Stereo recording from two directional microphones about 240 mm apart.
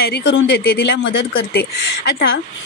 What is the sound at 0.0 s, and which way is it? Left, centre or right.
A woman's voice, left.